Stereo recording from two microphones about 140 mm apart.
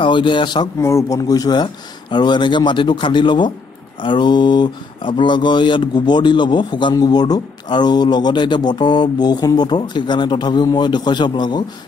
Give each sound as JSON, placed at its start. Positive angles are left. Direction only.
{"t": 0.0, "sound": "speech", "side_deg": 35}
{"t": 0.7, "sound": "speech", "side_deg": 20}